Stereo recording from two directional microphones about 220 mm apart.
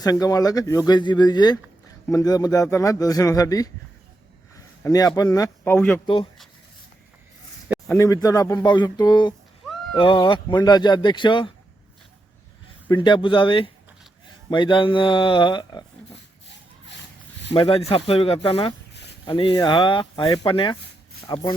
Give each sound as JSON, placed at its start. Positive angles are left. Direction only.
{"t": 0.0, "sound": "speech", "side_deg": 15}
{"t": 4.8, "sound": "speech", "side_deg": 15}
{"t": 7.9, "sound": "speech", "side_deg": 15}
{"t": 12.9, "sound": "speech", "side_deg": 20}
{"t": 17.5, "sound": "speech", "side_deg": 25}